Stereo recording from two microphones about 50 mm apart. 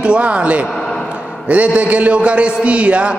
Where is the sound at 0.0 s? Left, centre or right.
Right.